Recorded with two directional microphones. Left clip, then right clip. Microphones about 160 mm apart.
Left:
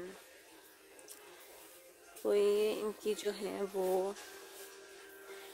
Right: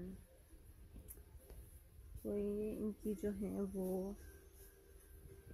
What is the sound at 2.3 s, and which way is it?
Music, 20° left (ahead or behind).